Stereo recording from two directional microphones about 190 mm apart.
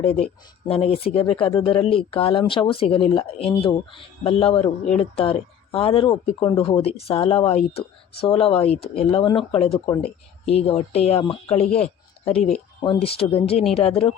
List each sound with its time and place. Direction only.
0.0 s speech: 30° left (ahead or behind)
12.8 s speech: 30° left (ahead or behind)